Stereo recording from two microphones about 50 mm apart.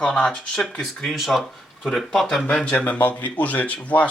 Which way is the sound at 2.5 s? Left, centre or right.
Centre.